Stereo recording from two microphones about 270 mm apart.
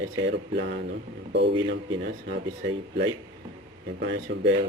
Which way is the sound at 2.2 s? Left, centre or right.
Right.